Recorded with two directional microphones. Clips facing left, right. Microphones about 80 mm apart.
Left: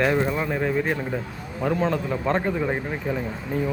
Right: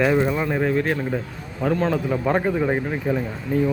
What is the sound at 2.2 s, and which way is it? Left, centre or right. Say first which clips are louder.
A man's voice: right 3 dB; centre.